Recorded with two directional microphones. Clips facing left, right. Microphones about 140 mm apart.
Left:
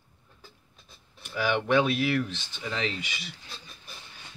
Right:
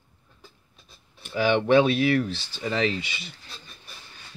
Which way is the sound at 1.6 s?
30° right (ahead or behind).